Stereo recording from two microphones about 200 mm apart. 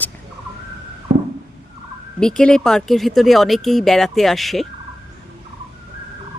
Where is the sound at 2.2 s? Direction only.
5° left (ahead or behind).